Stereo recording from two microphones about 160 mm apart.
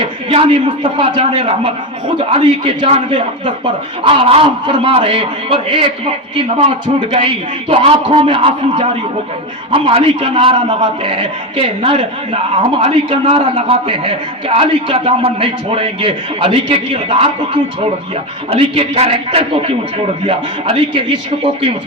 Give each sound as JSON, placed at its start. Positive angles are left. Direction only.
{"t": 0.0, "sound": "a man's voice", "side_deg": -35}
{"t": 7.1, "sound": "a man's voice", "side_deg": -35}